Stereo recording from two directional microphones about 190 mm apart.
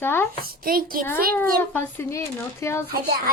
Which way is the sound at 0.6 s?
50° right (ahead or behind).